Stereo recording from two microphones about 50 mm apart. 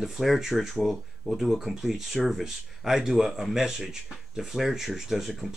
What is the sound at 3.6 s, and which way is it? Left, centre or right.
Speech, centre.